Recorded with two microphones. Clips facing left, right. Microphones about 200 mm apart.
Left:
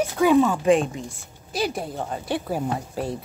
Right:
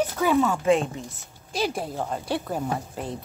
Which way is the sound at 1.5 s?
Centre (ahead or behind).